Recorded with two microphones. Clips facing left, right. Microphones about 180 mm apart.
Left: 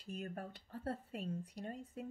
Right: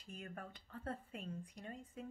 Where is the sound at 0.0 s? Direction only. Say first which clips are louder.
Left 5 dB; 35° left (ahead or behind).